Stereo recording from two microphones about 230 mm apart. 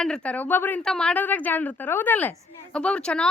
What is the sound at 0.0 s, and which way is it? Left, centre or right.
A woman's voice, centre.